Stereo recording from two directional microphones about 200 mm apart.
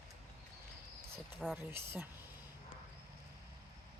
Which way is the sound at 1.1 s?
10° right (ahead or behind).